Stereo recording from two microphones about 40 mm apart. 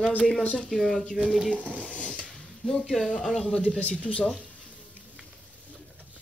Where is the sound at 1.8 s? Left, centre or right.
Left.